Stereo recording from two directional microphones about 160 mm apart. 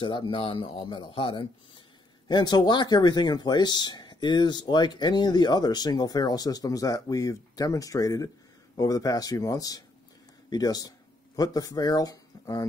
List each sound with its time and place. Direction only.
0.0 s speech: 30° left (ahead or behind)